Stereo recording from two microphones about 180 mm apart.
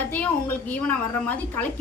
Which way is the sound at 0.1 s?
10° left (ahead or behind).